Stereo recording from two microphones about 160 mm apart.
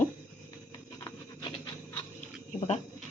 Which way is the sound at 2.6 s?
45° left (ahead or behind).